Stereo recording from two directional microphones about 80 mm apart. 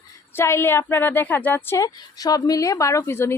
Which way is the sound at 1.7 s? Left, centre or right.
Left.